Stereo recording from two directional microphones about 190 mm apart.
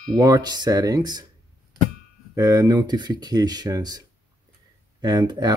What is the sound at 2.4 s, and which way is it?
Speech, 15° right (ahead or behind).